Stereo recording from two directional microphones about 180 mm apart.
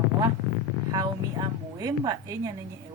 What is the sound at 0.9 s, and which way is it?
A woman's voice, 20° right (ahead or behind).